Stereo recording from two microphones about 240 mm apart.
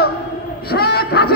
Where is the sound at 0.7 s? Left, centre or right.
Left.